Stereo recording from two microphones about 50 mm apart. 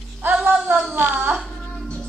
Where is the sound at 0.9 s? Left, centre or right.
Right.